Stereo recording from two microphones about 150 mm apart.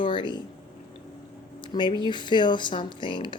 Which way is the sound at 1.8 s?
30° left (ahead or behind).